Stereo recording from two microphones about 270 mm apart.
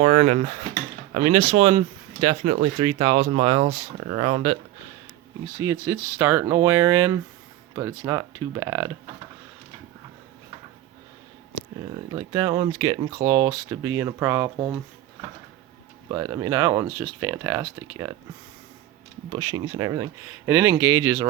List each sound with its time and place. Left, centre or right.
0.0 s speech: right
5.5 s speech: centre
12.1 s speech: centre
16.0 s speech: centre
19.3 s speech: centre